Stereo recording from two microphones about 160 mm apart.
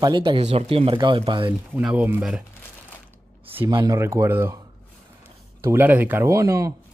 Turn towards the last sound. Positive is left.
turn(degrees=-20)  # may be behind; listen again after turning